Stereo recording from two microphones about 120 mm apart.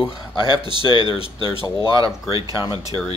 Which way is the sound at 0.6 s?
40° right (ahead or behind).